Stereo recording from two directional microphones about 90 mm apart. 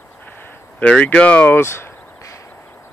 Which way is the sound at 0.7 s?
15° left (ahead or behind).